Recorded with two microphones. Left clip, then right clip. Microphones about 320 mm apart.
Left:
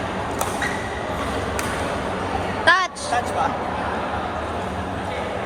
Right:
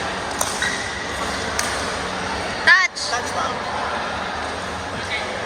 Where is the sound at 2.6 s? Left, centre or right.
Centre.